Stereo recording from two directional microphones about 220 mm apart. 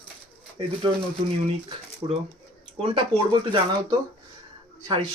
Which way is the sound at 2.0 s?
25° right (ahead or behind).